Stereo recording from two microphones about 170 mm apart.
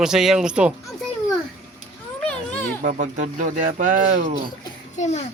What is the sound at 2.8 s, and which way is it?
Speech, 55° right (ahead or behind).